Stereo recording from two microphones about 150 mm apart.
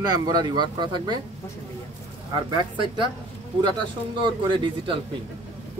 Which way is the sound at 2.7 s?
35° right (ahead or behind).